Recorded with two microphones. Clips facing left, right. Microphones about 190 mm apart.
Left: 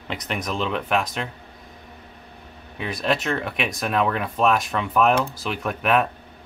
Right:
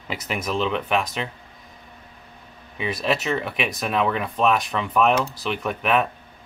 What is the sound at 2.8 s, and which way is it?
Speech, centre (ahead or behind).